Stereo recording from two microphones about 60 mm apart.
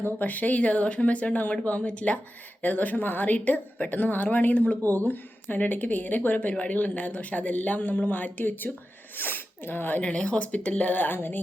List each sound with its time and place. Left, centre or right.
0.0 s a woman's voice: left
10.0 s a woman's voice: centre